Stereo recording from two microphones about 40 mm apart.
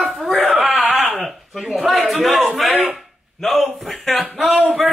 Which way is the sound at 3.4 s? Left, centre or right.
Centre.